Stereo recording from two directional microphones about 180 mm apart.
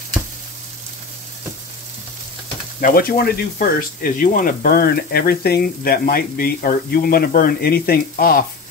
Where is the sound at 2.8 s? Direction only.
55° left (ahead or behind).